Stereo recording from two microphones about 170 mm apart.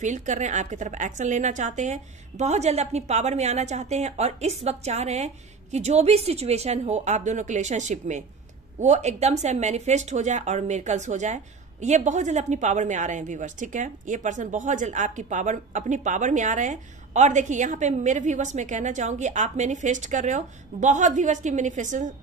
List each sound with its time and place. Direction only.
0.0 s a woman's voice: 45° right (ahead or behind)